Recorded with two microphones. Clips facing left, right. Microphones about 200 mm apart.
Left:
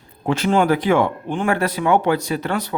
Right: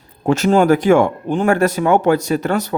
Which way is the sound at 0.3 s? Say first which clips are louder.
Right 4 dB; 45° right (ahead or behind).